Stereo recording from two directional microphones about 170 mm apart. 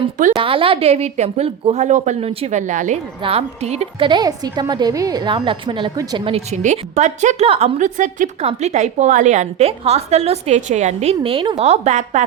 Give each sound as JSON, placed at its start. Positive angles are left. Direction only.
{"t": 0.3, "sound": "a woman's voice", "side_deg": -30}